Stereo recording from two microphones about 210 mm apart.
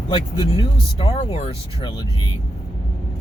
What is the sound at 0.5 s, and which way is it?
Speech, 25° left (ahead or behind).